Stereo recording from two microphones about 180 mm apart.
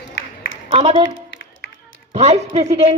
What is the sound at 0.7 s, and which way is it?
Speech, 30° right (ahead or behind).